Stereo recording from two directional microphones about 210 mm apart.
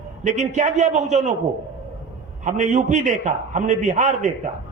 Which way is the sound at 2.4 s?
35° right (ahead or behind).